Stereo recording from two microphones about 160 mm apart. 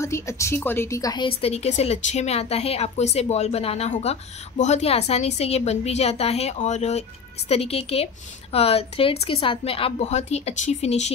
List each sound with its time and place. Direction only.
0.0 s a woman's voice: 15° left (ahead or behind); by 11.1 s 45° left (ahead or behind)